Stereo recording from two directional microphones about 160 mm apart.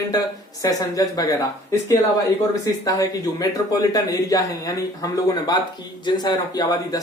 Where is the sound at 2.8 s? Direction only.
20° left (ahead or behind).